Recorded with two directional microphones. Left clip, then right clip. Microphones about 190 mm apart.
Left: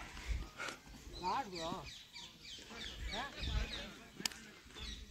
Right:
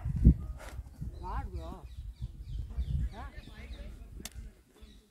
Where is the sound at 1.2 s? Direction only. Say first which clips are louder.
Left 4 dB; 10° left (ahead or behind).